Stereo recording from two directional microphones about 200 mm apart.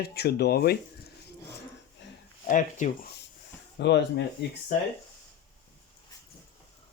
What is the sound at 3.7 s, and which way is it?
Speech, 60° left (ahead or behind).